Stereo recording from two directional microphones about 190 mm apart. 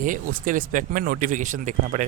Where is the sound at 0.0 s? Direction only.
45° right (ahead or behind).